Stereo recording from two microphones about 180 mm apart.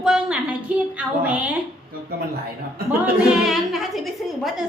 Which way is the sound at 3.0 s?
5° right (ahead or behind).